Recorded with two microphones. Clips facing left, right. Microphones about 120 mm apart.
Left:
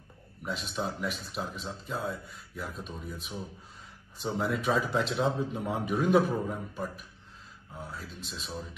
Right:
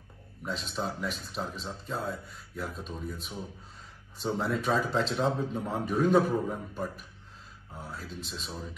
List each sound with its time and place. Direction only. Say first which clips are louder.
0.5 s speech: even; 5° left (ahead or behind)
7.7 s speech: right 1 dB; centre (ahead or behind)